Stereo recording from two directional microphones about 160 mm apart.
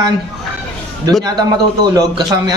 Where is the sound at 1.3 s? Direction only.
25° right (ahead or behind).